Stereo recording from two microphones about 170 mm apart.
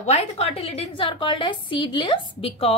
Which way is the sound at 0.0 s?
40° left (ahead or behind).